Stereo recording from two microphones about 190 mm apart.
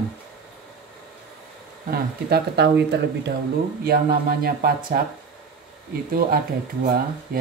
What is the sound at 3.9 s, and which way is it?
Mantra, 50° right (ahead or behind).